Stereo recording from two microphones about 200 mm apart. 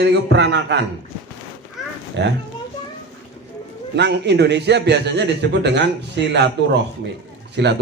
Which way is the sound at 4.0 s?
60° right (ahead or behind).